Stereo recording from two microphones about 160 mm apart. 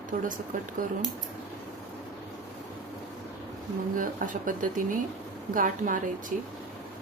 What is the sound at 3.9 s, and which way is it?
A woman's voice, 55° right (ahead or behind).